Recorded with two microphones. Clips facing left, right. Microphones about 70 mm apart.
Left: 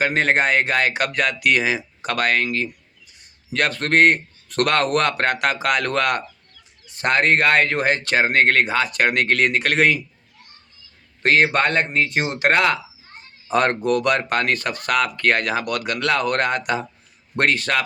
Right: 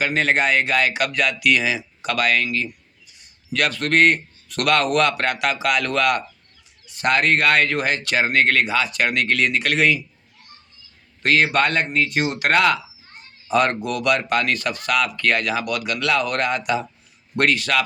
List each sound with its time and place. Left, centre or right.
0.0 s speech: left
11.2 s speech: left
13.5 s speech: left